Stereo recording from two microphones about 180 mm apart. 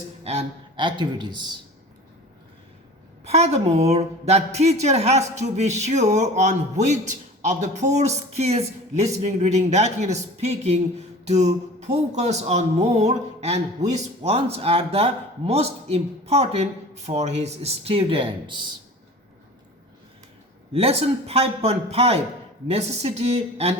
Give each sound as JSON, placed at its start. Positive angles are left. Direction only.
{"t": 0.3, "sound": "a man's voice", "side_deg": -30}
{"t": 3.2, "sound": "speech", "side_deg": -35}
{"t": 20.7, "sound": "speech", "side_deg": -35}